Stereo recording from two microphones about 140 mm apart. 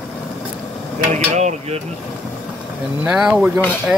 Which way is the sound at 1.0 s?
55° right (ahead or behind).